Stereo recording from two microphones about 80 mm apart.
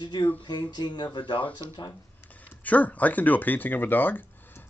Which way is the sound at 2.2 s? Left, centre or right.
Left.